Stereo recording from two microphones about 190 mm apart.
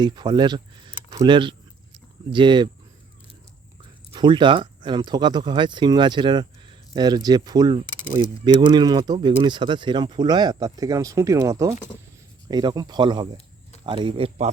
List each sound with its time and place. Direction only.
0.0 s speech: 25° right (ahead or behind)
4.1 s speech: 25° right (ahead or behind)